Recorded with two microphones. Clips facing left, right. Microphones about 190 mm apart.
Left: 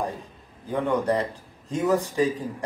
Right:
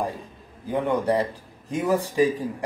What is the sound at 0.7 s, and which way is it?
Speech, 15° right (ahead or behind).